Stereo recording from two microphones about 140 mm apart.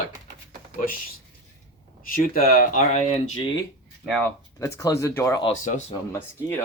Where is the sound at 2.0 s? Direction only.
90° left; by 3.3 s 55° left (ahead or behind).